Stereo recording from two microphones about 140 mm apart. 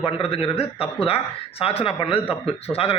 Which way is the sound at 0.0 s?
40° left (ahead or behind).